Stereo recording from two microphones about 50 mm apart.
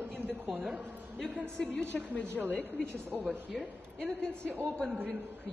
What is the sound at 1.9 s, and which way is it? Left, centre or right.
Speech, left.